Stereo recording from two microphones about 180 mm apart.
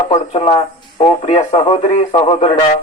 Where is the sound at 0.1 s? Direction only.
30° left (ahead or behind).